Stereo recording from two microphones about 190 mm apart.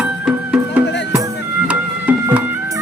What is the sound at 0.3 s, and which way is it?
Music, 5° right (ahead or behind).